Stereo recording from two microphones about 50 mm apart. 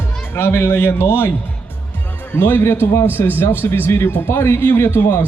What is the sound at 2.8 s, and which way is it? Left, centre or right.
Speech, left.